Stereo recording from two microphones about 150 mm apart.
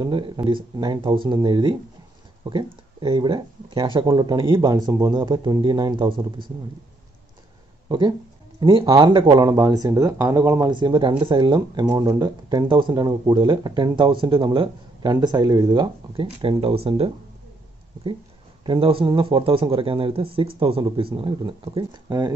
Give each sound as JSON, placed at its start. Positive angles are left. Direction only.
{"t": 0.0, "sound": "speech", "side_deg": -30}
{"t": 8.5, "sound": "speech", "side_deg": -30}
{"t": 10.7, "sound": "speech", "side_deg": -30}
{"t": 18.7, "sound": "speech", "side_deg": -35}